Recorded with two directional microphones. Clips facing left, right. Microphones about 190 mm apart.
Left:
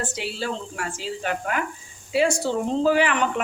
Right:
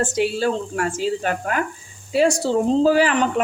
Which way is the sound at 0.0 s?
50° right (ahead or behind).